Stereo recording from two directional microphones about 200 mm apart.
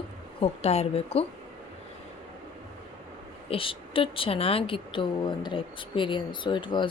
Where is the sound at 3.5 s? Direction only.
25° left (ahead or behind).